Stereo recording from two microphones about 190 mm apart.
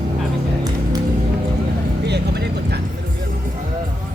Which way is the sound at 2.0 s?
60° right (ahead or behind).